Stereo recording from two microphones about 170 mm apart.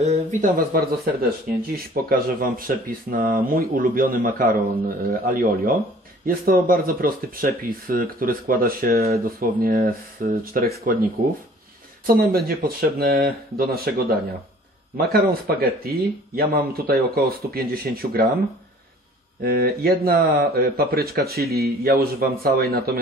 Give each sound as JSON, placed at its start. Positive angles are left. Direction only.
{"t": 0.0, "sound": "a sound", "side_deg": -45}
{"t": 2.0, "sound": "speech", "side_deg": -60}
{"t": 12.1, "sound": "speech", "side_deg": -60}